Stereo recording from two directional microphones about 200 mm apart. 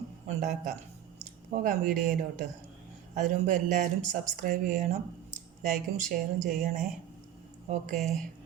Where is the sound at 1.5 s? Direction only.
45° right (ahead or behind).